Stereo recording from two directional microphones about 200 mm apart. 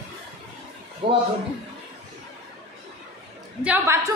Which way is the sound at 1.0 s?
25° right (ahead or behind).